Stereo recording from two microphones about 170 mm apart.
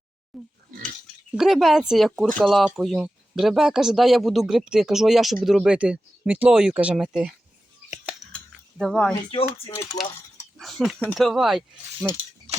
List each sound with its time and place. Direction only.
0.3 s speech: centre (ahead or behind)
0.7 s pig: 50° right (ahead or behind)
1.3 s speech: centre (ahead or behind)
7.9 s scissors: centre (ahead or behind)
8.8 s speech: 5° left (ahead or behind)
9.6 s speech: 20° left (ahead or behind)
10.6 s speech: centre (ahead or behind)